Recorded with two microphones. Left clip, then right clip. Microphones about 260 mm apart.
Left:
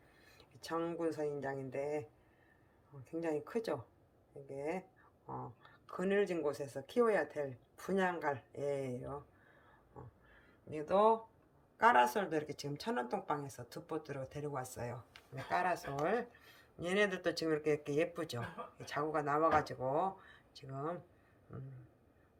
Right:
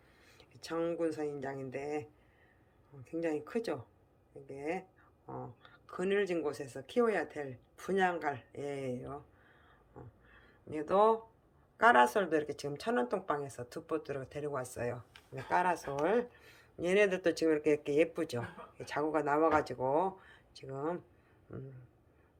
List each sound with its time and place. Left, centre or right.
0.3 s speech: centre